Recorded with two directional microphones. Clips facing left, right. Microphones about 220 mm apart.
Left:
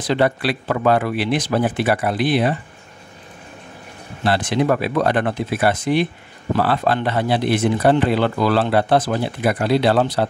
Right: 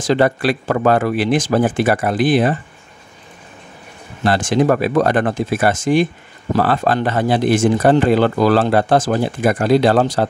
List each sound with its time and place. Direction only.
0.1 s speech: 45° right (ahead or behind)
4.2 s speech: 45° right (ahead or behind)